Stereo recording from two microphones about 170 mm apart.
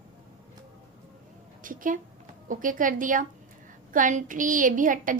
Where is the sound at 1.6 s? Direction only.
50° right (ahead or behind).